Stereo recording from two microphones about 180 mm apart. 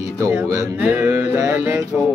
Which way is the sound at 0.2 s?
15° right (ahead or behind).